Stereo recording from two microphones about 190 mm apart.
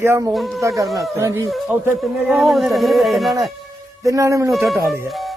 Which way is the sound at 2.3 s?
Centre (ahead or behind).